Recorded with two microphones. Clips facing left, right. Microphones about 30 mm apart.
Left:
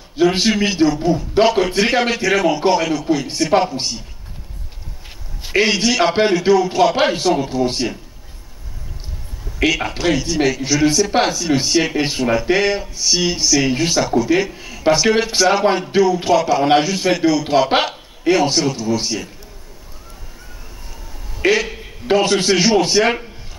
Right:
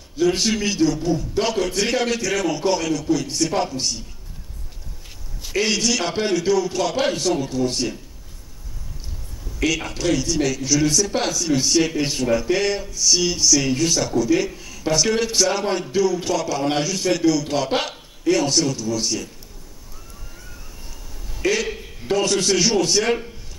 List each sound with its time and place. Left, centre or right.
0.1 s speech: left
5.4 s a man's voice: left
9.6 s speech: left
21.6 s a sound: centre
22.0 s speech: left